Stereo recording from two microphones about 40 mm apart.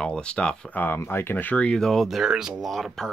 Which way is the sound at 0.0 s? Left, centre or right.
Left.